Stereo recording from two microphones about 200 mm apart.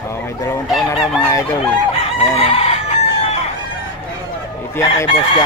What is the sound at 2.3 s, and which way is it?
Chicken, 30° left (ahead or behind).